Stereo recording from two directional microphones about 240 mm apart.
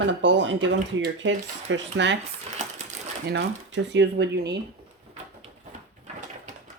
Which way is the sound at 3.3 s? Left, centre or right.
Right.